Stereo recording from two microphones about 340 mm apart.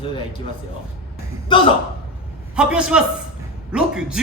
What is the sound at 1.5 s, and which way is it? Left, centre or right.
Speech, centre.